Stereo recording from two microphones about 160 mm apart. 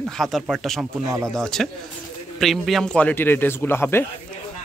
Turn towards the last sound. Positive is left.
turn(degrees=15)  # may be behind; listen again after turning